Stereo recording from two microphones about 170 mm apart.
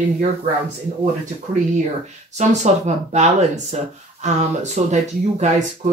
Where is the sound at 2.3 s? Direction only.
40° right (ahead or behind).